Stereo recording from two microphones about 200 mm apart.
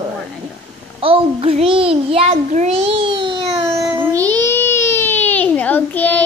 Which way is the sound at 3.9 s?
15° right (ahead or behind).